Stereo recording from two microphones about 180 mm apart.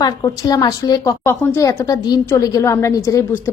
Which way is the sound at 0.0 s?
20° left (ahead or behind).